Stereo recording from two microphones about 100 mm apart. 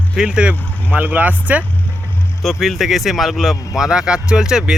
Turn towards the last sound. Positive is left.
turn(degrees=-5)  # may be behind; listen again after turning